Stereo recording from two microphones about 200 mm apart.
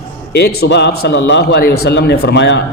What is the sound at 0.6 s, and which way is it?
A man's voice, 55° left (ahead or behind).